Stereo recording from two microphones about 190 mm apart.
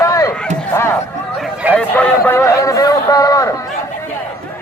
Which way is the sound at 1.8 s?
5° left (ahead or behind).